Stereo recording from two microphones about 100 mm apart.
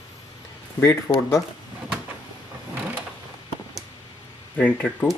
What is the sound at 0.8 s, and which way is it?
Speech, 25° left (ahead or behind).